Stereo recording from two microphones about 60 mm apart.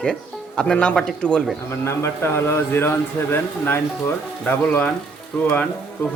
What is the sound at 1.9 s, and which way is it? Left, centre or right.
A man's voice, left.